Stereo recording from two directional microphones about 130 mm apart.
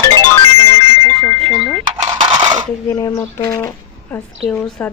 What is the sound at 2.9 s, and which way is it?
Speech, 30° left (ahead or behind).